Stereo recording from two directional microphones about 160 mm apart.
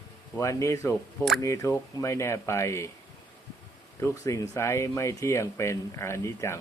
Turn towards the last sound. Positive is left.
turn(degrees=15)  # may be behind; listen again after turning